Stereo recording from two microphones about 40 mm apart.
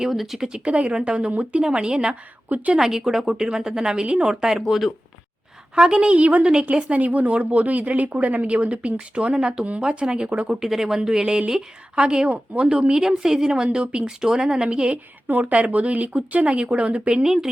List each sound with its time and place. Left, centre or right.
0.1 s speech: centre
0.3 s speech: right
2.5 s a woman's voice: right
2.7 s a woman's voice: centre
4.0 s speech: right
5.7 s a woman's voice: centre
10.5 s a woman's voice: centre
15.3 s a woman's voice: right
17.2 s a woman's voice: centre